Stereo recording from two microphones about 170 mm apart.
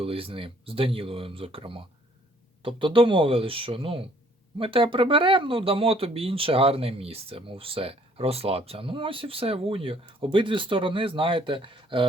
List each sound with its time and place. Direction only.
0.0 s speech: 35° right (ahead or behind)